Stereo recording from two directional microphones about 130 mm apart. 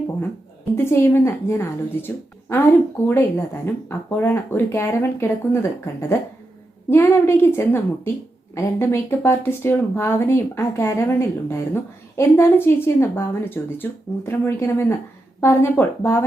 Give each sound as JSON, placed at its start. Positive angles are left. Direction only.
{"t": 0.9, "sound": "a woman's voice", "side_deg": 20}